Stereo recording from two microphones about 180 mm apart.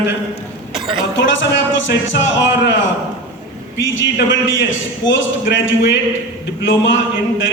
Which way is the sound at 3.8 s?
90° left.